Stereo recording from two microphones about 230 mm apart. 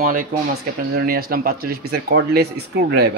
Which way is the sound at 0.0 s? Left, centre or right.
Right.